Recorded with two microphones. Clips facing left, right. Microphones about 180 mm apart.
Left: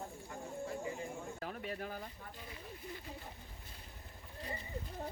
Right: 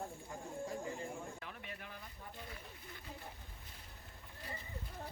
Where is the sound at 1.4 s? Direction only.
40° left (ahead or behind).